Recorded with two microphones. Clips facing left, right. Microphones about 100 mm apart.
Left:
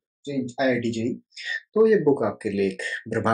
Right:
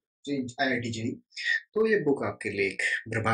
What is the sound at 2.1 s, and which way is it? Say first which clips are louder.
Speech: left 6 dB; 25° left (ahead or behind).